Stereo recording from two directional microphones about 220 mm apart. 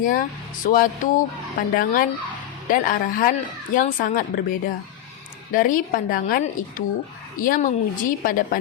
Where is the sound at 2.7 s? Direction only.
40° left (ahead or behind).